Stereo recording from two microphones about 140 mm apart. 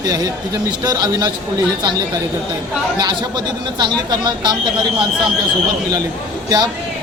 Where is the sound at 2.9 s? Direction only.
30° right (ahead or behind).